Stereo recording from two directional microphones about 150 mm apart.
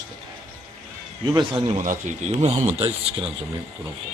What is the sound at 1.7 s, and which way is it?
Speech, 55° right (ahead or behind).